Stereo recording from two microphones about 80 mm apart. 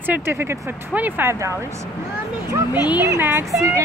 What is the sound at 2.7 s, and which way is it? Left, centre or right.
Speech, left.